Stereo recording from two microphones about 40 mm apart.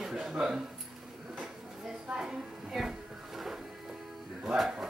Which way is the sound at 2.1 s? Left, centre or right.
Centre.